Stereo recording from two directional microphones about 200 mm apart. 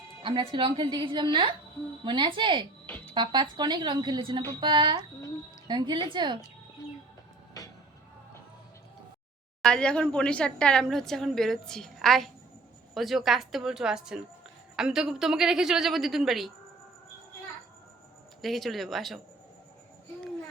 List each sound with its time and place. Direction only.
0.2 s speech: 25° right (ahead or behind)
2.8 s a sound: 10° left (ahead or behind)
3.2 s speech: 20° right (ahead or behind)
9.6 s a woman's voice: 5° left (ahead or behind)
18.4 s a woman's voice: centre (ahead or behind)